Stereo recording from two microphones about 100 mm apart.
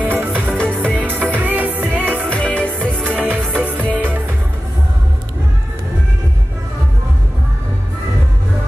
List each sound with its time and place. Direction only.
0.0 s music: 15° right (ahead or behind)
0.3 s music: 5° left (ahead or behind)
0.9 s music: 15° right (ahead or behind)
2.2 s music: 10° left (ahead or behind)
3.0 s music: 15° right (ahead or behind)